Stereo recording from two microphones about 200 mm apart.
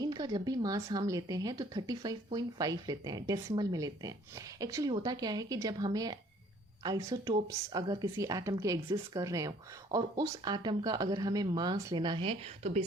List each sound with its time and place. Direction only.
0.0 s speech: 20° right (ahead or behind)